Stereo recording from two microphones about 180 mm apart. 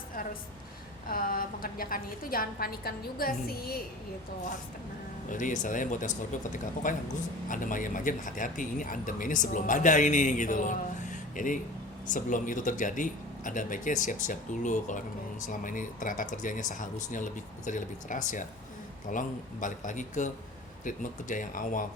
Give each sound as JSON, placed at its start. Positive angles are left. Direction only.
{"t": 1.0, "sound": "speech", "side_deg": 50}
{"t": 5.3, "sound": "speech", "side_deg": 45}